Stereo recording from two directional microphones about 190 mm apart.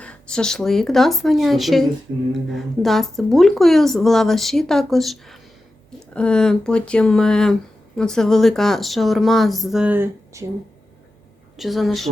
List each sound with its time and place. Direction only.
0.0 s speech: 5° left (ahead or behind); by 10.4 s 10° right (ahead or behind)
11.5 s speech: centre (ahead or behind)